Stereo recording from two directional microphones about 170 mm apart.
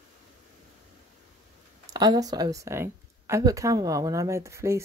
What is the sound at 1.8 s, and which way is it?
Speech, 25° right (ahead or behind).